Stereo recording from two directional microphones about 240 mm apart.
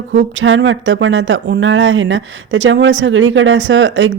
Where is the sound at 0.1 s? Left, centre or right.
Right.